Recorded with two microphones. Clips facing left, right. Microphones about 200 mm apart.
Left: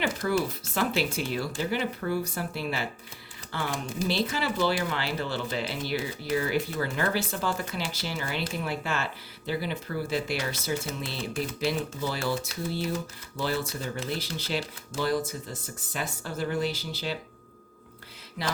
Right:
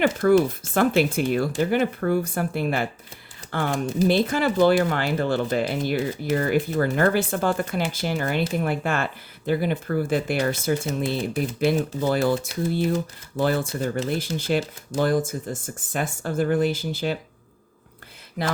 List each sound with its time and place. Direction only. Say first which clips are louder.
0.0 s speech: right 9 dB; 55° right (ahead or behind)